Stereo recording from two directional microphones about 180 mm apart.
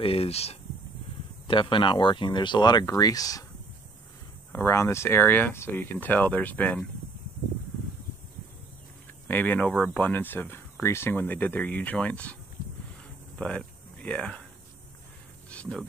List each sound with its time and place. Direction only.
0.0 s speech: 30° left (ahead or behind)
4.5 s speech: 15° left (ahead or behind)
9.3 s speech: 10° left (ahead or behind)
13.4 s speech: 5° left (ahead or behind)
15.5 s a sound: 5° left (ahead or behind)